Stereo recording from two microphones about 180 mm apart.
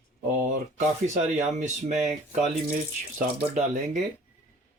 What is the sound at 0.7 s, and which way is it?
Speech, 45° right (ahead or behind).